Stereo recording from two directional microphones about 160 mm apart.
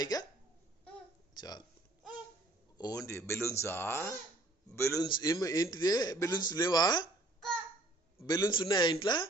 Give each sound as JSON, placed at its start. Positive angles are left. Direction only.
{"t": 0.0, "sound": "speech", "side_deg": 25}
{"t": 1.3, "sound": "hiccup", "side_deg": 25}
{"t": 2.7, "sound": "speech", "side_deg": 25}
{"t": 5.0, "sound": "speech", "side_deg": 25}
{"t": 8.2, "sound": "speech", "side_deg": 25}